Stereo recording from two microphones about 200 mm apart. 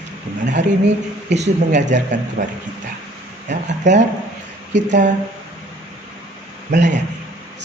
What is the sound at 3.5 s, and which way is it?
Speech, 35° right (ahead or behind).